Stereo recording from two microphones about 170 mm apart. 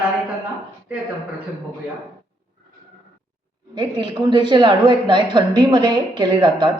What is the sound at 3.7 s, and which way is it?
A woman's voice, 25° right (ahead or behind).